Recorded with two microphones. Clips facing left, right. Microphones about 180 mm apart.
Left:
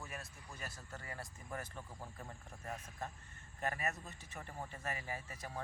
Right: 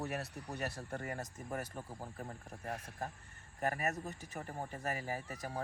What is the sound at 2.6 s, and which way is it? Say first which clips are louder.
Speech: right 3 dB; 70° right (ahead or behind).